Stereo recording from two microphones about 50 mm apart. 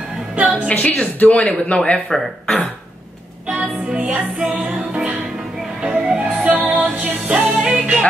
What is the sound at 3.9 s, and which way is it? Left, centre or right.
Music, right.